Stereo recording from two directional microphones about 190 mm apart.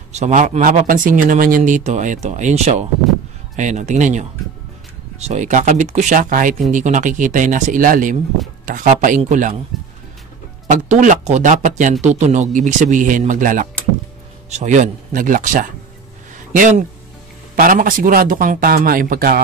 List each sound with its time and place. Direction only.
0.1 s speech: 40° right (ahead or behind)
10.7 s speech: 40° right (ahead or behind)